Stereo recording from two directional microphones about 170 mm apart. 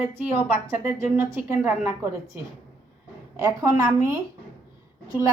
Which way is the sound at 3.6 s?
20° right (ahead or behind).